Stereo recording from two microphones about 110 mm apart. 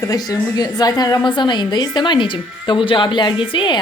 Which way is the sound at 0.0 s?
35° left (ahead or behind).